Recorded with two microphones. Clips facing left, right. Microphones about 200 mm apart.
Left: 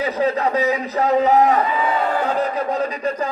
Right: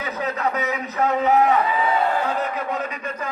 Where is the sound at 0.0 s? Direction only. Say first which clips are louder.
Left 6 dB; 30° left (ahead or behind).